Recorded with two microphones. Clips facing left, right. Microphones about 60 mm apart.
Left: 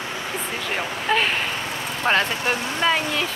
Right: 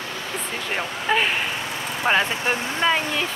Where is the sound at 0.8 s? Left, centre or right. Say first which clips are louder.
Even; centre.